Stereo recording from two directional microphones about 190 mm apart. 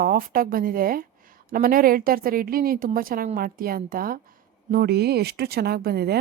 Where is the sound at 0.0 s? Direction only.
45° right (ahead or behind).